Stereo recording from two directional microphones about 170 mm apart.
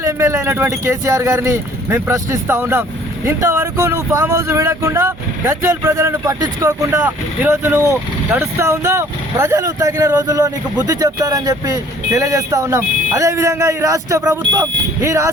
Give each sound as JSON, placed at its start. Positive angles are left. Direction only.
{"t": 0.0, "sound": "speech", "side_deg": -15}